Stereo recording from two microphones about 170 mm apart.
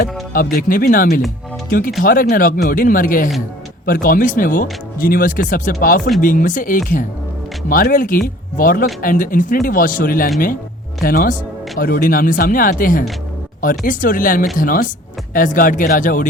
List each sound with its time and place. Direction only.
0.5 s speech: 55° left (ahead or behind)